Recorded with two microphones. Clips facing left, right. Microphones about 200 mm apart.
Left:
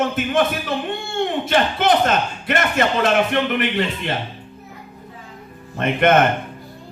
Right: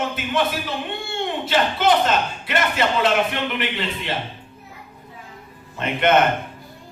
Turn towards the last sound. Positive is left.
turn(degrees=50)  # may be behind; listen again after turning